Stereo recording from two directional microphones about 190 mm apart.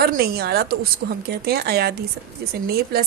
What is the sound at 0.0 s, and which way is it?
Speech, 50° right (ahead or behind).